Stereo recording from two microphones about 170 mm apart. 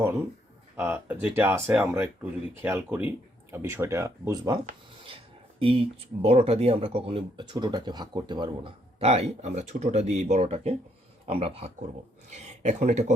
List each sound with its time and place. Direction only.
0.8 s speech: 10° right (ahead or behind); by 13.1 s 45° right (ahead or behind)